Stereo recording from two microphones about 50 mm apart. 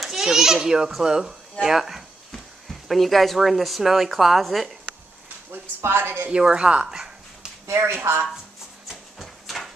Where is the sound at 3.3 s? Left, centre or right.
Centre.